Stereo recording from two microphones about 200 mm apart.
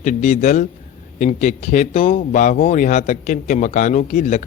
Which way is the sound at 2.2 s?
40° left (ahead or behind).